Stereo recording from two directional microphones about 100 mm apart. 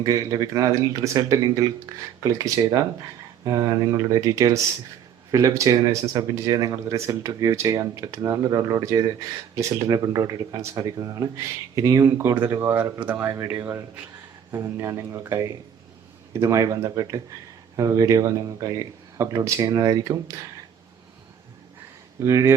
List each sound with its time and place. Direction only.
0.0 s speech: 35° right (ahead or behind); by 13.3 s 15° right (ahead or behind)
13.6 s speech: 30° right (ahead or behind)
22.2 s speech: 30° right (ahead or behind)